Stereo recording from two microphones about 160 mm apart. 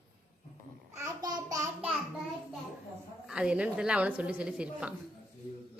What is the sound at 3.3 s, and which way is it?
A woman's voice, 5° right (ahead or behind).